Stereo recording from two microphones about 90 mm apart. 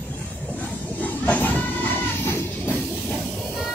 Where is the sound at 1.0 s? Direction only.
20° left (ahead or behind).